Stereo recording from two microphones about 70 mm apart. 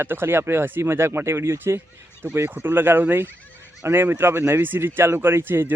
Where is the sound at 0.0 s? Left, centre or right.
Right.